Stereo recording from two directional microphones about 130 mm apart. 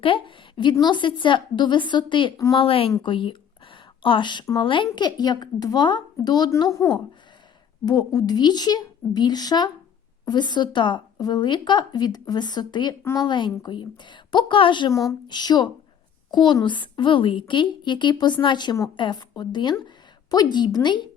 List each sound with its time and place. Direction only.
0.0 s speech: 40° left (ahead or behind)
3.0 s a sound: 40° left (ahead or behind)
4.6 s speech: 40° left (ahead or behind)